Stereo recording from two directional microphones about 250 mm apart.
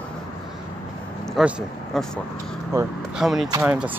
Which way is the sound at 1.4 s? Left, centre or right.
Centre.